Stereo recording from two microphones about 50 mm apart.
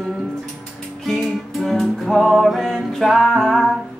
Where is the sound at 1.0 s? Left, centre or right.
Centre.